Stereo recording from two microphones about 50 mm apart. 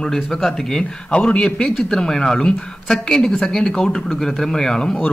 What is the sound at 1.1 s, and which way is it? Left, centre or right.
Speech, left.